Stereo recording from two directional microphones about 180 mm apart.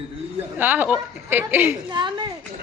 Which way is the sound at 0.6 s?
10° right (ahead or behind).